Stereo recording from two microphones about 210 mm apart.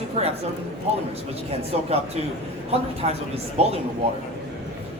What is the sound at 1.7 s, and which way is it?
Speech, 30° right (ahead or behind).